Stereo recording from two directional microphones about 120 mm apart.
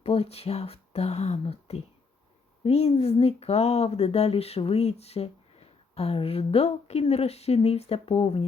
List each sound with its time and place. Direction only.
0.0 s speech: 55° left (ahead or behind)